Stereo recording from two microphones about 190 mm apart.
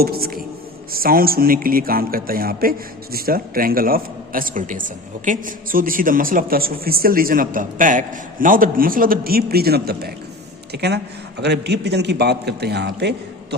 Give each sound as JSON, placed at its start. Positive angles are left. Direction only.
{"t": 0.0, "sound": "a man's voice", "side_deg": -50}